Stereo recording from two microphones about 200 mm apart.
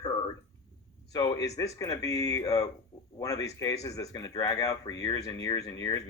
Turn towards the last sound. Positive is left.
turn(degrees=15)  # may be behind; listen again after turning